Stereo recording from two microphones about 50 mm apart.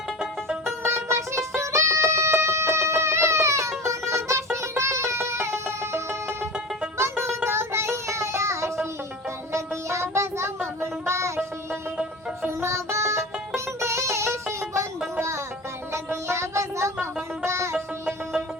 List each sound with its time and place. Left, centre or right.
0.9 s music: right
7.0 s child singing: right
9.5 s music: right
12.5 s music: right
15.9 s music: right